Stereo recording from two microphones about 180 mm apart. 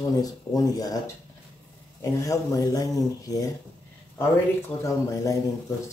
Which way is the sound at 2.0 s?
20° left (ahead or behind).